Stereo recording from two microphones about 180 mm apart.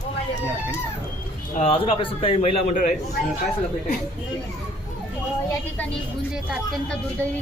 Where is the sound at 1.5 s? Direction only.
30° left (ahead or behind).